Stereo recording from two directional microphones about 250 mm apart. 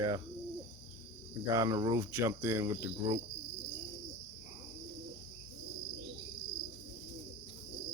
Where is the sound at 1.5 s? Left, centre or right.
Centre.